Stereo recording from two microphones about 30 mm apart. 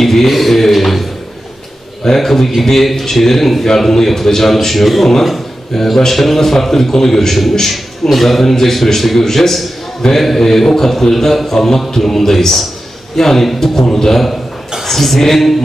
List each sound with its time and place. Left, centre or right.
0.0 s speech: centre
2.0 s a man's voice: centre